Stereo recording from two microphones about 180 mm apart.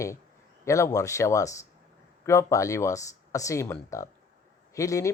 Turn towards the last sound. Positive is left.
turn(degrees=15)  # may be behind; listen again after turning